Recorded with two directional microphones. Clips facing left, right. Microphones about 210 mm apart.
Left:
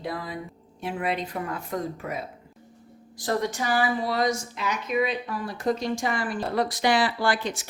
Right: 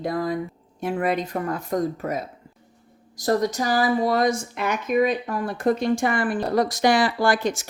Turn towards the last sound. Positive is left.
turn(degrees=-45)  # may be behind; listen again after turning